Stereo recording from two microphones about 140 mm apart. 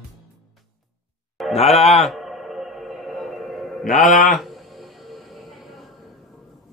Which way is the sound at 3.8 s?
70° left (ahead or behind).